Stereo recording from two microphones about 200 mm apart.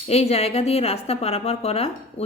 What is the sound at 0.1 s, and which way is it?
A woman's voice, 30° left (ahead or behind).